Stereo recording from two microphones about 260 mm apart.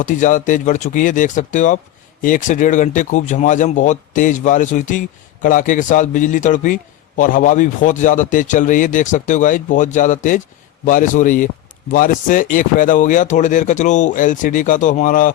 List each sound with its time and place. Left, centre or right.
0.0 s a man's voice: left